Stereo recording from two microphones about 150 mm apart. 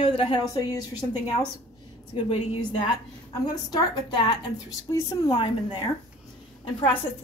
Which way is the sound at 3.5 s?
25° left (ahead or behind).